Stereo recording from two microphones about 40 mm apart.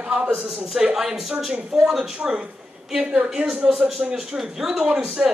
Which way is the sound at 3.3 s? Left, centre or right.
Centre.